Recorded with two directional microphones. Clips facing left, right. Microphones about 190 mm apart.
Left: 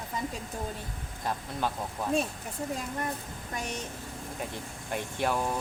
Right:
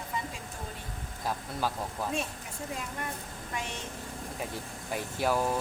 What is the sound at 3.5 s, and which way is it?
Speech, 40° left (ahead or behind).